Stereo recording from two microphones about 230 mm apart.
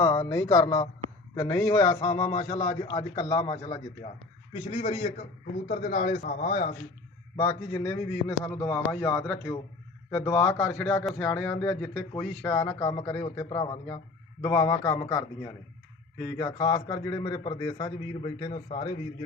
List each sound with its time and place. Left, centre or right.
0.0 s a man's voice: centre; by 6.7 s left
7.3 s a man's voice: centre